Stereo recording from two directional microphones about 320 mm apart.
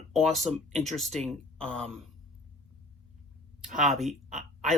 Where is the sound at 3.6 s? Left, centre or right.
Centre.